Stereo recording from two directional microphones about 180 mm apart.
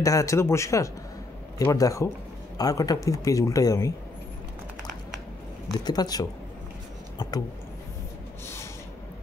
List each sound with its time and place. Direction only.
0.0 s speech: 20° left (ahead or behind)
5.7 s speech: 20° left (ahead or behind)
7.2 s a sound: 20° left (ahead or behind)